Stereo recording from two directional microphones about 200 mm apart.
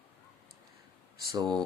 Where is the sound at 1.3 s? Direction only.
20° right (ahead or behind).